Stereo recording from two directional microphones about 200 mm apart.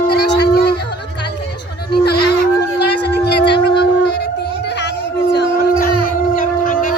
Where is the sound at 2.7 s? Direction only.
55° left (ahead or behind).